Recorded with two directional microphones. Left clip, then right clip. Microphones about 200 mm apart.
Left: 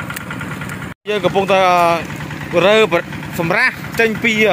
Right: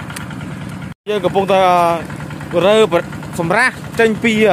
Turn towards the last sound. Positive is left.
turn(degrees=-15)  # may be behind; listen again after turning